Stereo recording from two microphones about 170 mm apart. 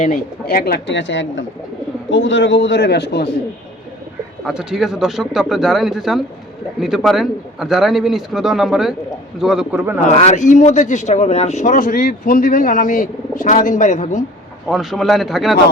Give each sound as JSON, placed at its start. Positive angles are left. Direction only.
{"t": 0.0, "sound": "a man's voice", "side_deg": 55}
{"t": 4.4, "sound": "a man's voice", "side_deg": 0}
{"t": 10.1, "sound": "speech", "side_deg": 40}
{"t": 14.7, "sound": "speech", "side_deg": 0}